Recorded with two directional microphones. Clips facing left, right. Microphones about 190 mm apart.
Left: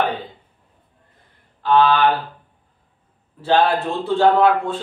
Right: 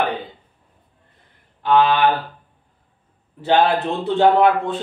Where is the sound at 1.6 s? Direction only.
20° right (ahead or behind).